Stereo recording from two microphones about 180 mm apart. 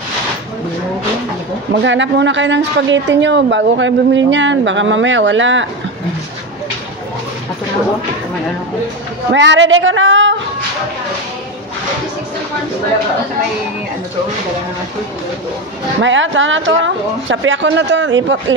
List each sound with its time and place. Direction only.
1.7 s a woman's voice: 80° right
9.3 s a woman's voice: 85° right
16.0 s a woman's voice: 90° right